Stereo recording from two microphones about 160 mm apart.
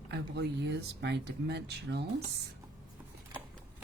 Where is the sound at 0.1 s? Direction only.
90° right.